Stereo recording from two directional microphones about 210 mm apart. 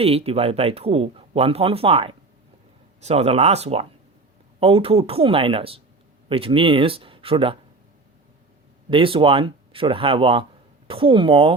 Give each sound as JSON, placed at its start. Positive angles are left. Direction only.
{"t": 0.0, "sound": "a man's voice", "side_deg": -30}
{"t": 8.9, "sound": "a man's voice", "side_deg": -25}